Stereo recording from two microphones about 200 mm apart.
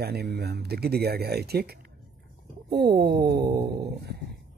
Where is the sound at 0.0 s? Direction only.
50° right (ahead or behind).